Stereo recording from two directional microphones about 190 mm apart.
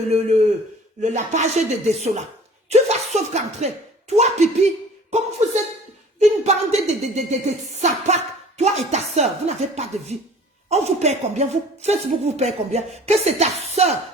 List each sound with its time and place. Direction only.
0.1 s a woman's voice: 35° right (ahead or behind)
6.1 s a woman's voice: 35° right (ahead or behind)